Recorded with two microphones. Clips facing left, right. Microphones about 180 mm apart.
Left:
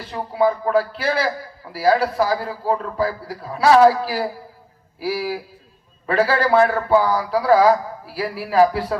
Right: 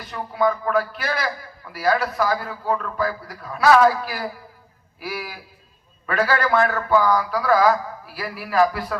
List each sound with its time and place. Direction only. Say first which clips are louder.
0.0 s a man's voice: left 3 dB; 30° left (ahead or behind)